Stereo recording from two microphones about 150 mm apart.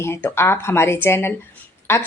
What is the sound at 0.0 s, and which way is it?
Speech, 15° left (ahead or behind).